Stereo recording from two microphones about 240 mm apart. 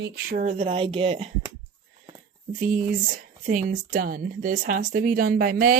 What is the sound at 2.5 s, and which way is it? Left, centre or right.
Speech, right.